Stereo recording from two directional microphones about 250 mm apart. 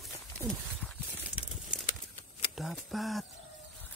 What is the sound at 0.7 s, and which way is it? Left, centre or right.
Horse, centre.